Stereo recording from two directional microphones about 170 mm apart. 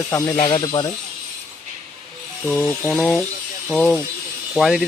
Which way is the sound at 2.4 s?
5° left (ahead or behind).